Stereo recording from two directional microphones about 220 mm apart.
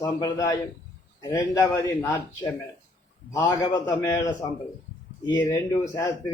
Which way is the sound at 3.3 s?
15° left (ahead or behind).